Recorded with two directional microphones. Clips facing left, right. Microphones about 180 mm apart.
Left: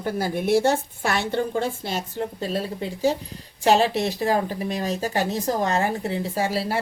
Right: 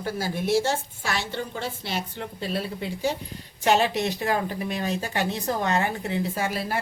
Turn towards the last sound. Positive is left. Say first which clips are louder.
# left 3 dB
turn(degrees=30)  # may be behind; listen again after turning